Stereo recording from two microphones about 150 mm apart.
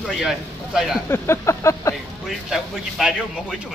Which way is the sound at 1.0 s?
15° left (ahead or behind).